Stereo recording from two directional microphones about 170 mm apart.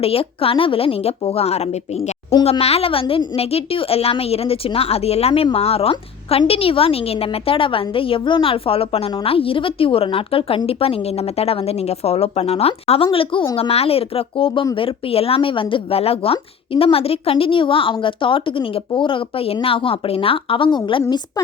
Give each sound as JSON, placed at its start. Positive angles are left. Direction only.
{"t": 0.0, "sound": "a woman's voice", "side_deg": 35}